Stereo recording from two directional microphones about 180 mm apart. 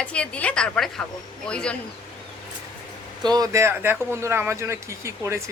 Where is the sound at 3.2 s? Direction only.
20° right (ahead or behind).